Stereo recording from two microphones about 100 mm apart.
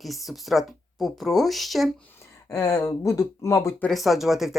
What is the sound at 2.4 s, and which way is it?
Speech, 30° left (ahead or behind).